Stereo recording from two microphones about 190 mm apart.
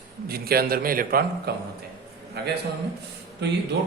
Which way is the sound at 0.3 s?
55° right (ahead or behind).